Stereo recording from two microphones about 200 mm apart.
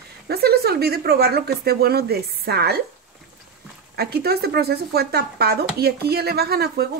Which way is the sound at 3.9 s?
50° right (ahead or behind).